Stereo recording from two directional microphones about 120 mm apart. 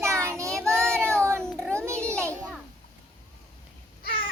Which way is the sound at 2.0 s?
20° right (ahead or behind).